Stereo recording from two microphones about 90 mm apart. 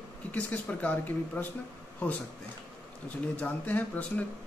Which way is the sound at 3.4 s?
20° left (ahead or behind).